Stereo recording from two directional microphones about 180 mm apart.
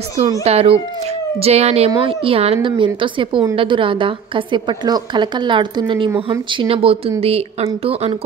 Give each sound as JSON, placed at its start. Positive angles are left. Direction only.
{"t": 0.4, "sound": "a woman's voice", "side_deg": -35}